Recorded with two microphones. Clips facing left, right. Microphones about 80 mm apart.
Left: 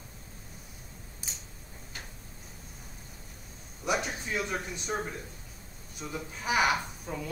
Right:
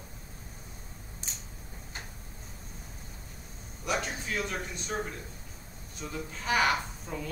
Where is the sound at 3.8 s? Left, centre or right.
Centre.